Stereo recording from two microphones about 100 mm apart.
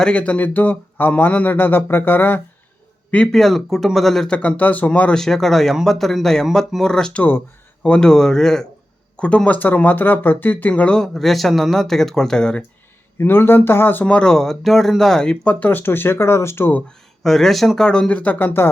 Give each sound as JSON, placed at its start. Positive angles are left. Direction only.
{"t": 0.0, "sound": "speech", "side_deg": 10}
{"t": 3.1, "sound": "speech", "side_deg": 5}
{"t": 4.4, "sound": "speech", "side_deg": 15}
{"t": 7.2, "sound": "speech", "side_deg": 20}
{"t": 7.9, "sound": "speech", "side_deg": 10}
{"t": 13.1, "sound": "speech", "side_deg": 20}
{"t": 17.2, "sound": "speech", "side_deg": 5}